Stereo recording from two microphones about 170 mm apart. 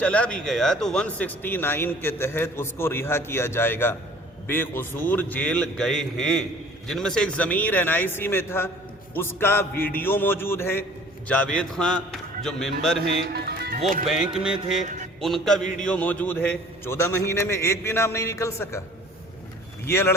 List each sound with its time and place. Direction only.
0.0 s speech: 5° left (ahead or behind)
13.2 s music: 70° right (ahead or behind)
14.3 s speech: 5° right (ahead or behind); by 18.8 s 15° left (ahead or behind)
19.8 s speech: 15° left (ahead or behind)